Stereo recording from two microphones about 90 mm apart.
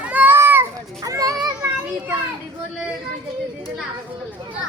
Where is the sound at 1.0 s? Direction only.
40° right (ahead or behind).